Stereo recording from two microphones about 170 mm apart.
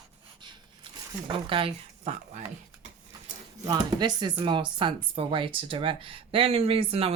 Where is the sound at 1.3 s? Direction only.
30° right (ahead or behind).